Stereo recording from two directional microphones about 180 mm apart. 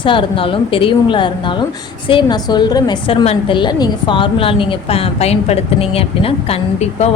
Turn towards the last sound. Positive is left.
turn(degrees=35)  # may be behind; listen again after turning